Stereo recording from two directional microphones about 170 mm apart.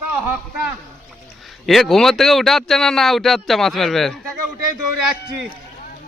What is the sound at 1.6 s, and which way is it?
Speech, centre (ahead or behind).